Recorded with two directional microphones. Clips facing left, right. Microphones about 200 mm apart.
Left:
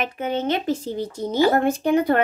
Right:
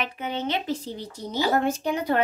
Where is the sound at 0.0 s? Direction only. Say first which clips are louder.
Left 5 dB; 50° left (ahead or behind).